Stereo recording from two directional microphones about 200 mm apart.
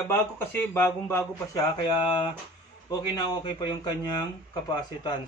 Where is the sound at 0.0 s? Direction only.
10° left (ahead or behind).